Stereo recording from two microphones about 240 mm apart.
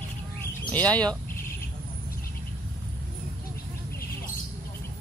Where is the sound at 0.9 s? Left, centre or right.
Centre.